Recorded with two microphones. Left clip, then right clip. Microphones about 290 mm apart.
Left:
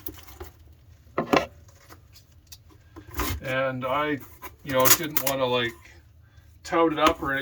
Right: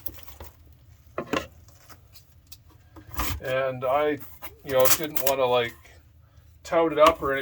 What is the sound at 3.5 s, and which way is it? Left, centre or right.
Speech, centre.